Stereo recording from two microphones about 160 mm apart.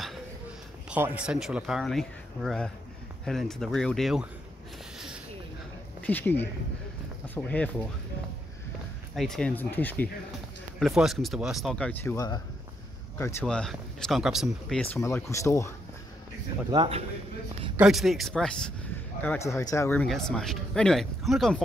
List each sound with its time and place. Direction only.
0.8 s speech: 10° right (ahead or behind)
4.9 s a sound: 5° right (ahead or behind)
6.0 s speech: 10° left (ahead or behind)
9.1 s speech: centre (ahead or behind)
10.8 s speech: centre (ahead or behind)
15.0 s speech: 20° left (ahead or behind)
16.7 s a man's voice: 35° right (ahead or behind)
17.7 s speech: centre (ahead or behind)
19.2 s speech: 15° left (ahead or behind)
20.1 s speech: 5° left (ahead or behind)